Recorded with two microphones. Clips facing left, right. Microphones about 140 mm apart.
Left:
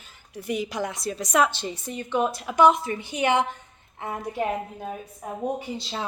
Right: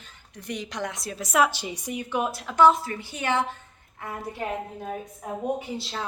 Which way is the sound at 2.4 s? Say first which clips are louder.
Right 1 dB; 15° left (ahead or behind).